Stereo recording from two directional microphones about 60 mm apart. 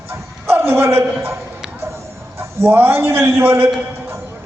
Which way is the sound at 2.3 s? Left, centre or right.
Right.